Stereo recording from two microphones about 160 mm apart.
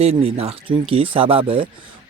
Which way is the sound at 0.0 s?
40° right (ahead or behind).